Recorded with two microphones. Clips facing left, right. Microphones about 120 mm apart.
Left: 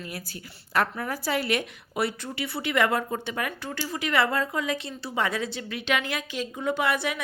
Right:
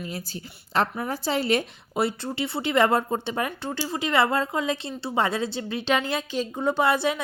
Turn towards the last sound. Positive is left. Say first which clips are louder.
# right 4 dB
turn(degrees=-30)  # may be behind; listen again after turning